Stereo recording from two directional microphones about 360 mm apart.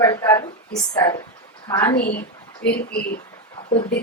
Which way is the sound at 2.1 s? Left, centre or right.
Left.